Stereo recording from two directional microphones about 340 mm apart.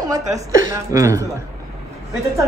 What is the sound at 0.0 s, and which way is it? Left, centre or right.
Speech, centre.